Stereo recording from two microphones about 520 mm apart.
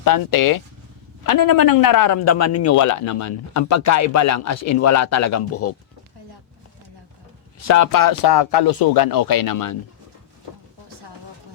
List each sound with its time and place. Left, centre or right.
0.0 s a man's voice: left
7.7 s a man's voice: left